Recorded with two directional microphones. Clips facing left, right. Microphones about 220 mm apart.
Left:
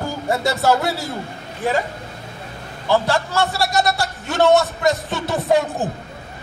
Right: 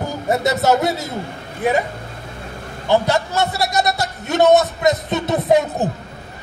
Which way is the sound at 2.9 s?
20° right (ahead or behind).